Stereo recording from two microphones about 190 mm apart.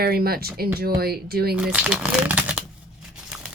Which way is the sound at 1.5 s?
5° right (ahead or behind).